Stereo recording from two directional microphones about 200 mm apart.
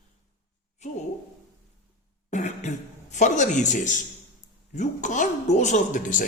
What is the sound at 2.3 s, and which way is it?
Throat clearing, 35° left (ahead or behind).